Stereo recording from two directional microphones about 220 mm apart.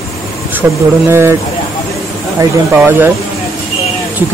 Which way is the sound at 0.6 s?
10° right (ahead or behind).